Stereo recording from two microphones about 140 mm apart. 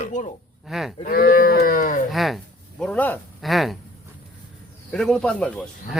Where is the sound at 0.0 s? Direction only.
60° left (ahead or behind).